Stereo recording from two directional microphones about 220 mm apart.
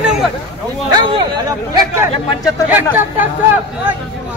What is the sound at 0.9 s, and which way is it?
Speech, 20° right (ahead or behind).